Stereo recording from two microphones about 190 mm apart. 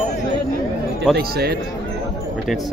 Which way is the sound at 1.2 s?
55° right (ahead or behind).